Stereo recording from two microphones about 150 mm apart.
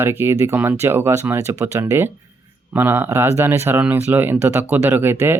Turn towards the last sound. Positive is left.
turn(degrees=-15)  # may be behind; listen again after turning